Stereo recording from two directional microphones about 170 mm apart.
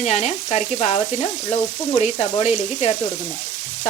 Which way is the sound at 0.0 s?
40° left (ahead or behind).